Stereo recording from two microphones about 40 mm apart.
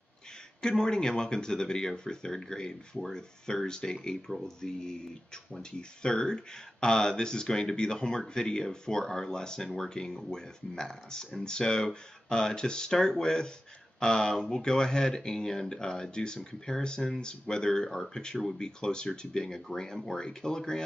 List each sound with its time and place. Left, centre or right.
0.6 s speech: centre